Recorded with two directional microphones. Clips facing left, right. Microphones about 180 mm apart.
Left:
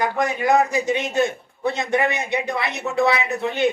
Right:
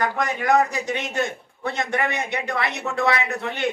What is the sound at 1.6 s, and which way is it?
A man's voice, 15° left (ahead or behind).